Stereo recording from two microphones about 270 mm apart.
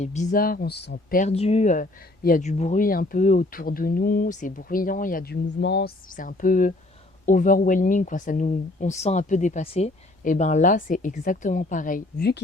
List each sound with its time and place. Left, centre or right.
0.0 s speech: left